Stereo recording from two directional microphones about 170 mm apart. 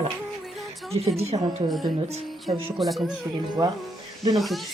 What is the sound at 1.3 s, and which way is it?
Speech, 35° right (ahead or behind).